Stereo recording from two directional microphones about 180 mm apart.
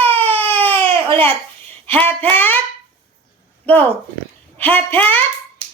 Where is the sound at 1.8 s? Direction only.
10° left (ahead or behind).